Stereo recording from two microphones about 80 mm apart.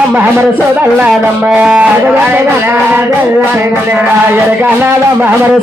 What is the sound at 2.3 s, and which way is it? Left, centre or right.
Music, right.